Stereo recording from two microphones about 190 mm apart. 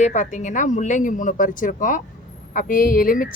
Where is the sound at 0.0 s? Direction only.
40° left (ahead or behind).